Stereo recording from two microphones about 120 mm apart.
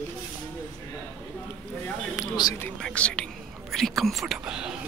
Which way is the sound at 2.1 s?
35° left (ahead or behind).